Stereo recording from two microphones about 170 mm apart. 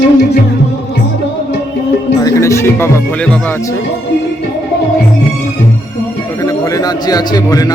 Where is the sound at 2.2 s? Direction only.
15° left (ahead or behind).